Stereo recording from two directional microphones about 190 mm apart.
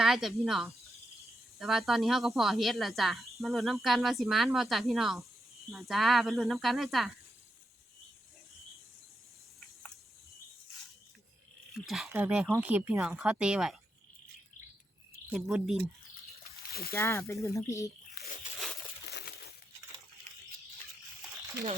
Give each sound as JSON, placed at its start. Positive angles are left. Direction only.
{"t": 0.0, "sound": "speech", "side_deg": 0}
{"t": 11.7, "sound": "speech", "side_deg": 0}
{"t": 15.3, "sound": "speech", "side_deg": 0}
{"t": 16.9, "sound": "speech", "side_deg": 10}
{"t": 18.1, "sound": "tearing", "side_deg": 55}
{"t": 19.0, "sound": "a sound", "side_deg": 60}